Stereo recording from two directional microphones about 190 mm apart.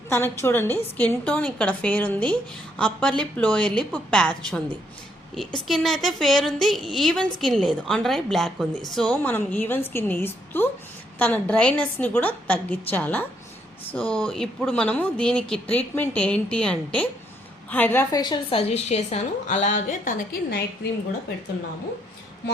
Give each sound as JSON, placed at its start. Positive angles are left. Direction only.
{"t": 0.1, "sound": "a woman's voice", "side_deg": 10}
{"t": 5.6, "sound": "a woman's voice", "side_deg": 0}
{"t": 14.3, "sound": "a woman's voice", "side_deg": 5}
{"t": 18.2, "sound": "a woman's voice", "side_deg": 25}